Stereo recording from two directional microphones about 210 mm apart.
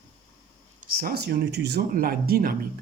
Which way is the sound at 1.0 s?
50° right (ahead or behind).